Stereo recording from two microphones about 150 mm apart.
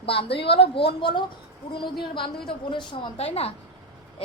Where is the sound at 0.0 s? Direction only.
40° left (ahead or behind).